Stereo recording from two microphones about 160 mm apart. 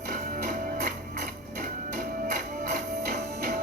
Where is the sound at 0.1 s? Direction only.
55° right (ahead or behind).